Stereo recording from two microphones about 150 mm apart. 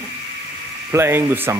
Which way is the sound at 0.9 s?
15° right (ahead or behind).